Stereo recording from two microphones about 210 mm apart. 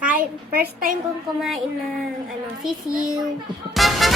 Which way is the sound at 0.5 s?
45° right (ahead or behind).